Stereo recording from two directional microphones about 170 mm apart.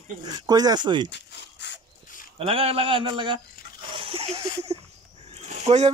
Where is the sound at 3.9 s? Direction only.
30° right (ahead or behind).